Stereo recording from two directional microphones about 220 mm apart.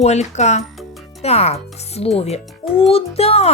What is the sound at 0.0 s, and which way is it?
Speech, 30° left (ahead or behind).